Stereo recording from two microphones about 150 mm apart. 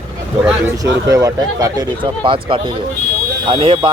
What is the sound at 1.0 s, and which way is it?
Speech, 25° right (ahead or behind).